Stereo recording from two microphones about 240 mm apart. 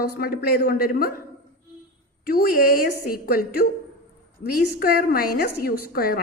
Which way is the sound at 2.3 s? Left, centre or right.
Left.